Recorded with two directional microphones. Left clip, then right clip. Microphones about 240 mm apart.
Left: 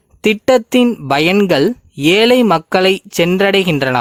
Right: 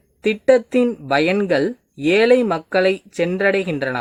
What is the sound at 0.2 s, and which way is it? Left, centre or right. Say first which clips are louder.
Speech: left 3 dB; left.